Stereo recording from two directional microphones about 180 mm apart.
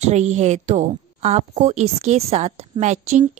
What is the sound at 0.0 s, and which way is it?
A woman's voice, 40° right (ahead or behind).